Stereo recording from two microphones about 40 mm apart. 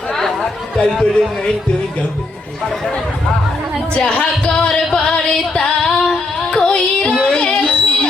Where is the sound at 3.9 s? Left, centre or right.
Left.